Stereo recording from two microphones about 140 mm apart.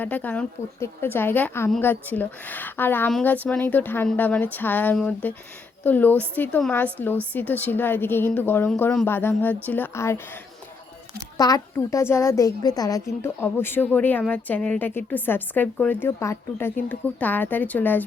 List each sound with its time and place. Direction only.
0.0 s a woman's voice: 10° left (ahead or behind)
11.3 s a woman's voice: 25° left (ahead or behind)